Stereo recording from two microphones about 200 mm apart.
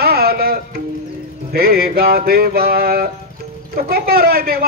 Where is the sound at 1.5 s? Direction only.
50° right (ahead or behind).